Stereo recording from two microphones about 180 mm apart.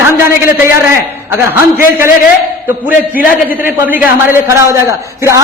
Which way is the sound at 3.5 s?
10° right (ahead or behind).